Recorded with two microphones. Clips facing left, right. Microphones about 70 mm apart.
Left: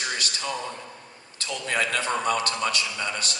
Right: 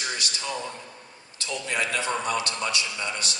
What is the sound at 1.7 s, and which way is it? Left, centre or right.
A man's voice, left.